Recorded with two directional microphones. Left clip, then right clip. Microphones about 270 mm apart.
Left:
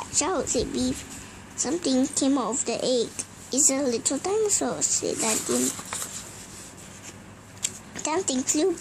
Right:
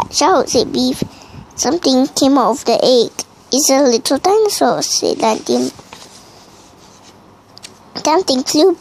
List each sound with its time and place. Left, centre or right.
0.0 s a woman's voice: right
7.9 s speech: right